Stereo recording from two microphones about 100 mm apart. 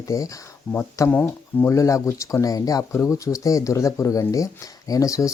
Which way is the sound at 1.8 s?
30° left (ahead or behind).